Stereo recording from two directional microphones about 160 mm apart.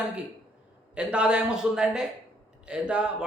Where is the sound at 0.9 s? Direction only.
5° right (ahead or behind).